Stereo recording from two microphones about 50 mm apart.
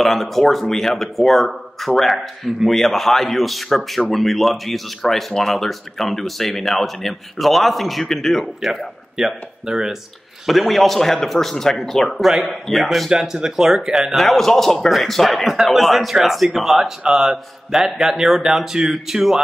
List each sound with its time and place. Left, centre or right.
0.0 s speech: centre
10.4 s speech: centre
13.1 s speech: centre
14.1 s speech: centre